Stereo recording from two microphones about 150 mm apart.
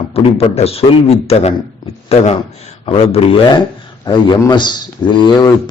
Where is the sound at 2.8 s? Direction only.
40° left (ahead or behind).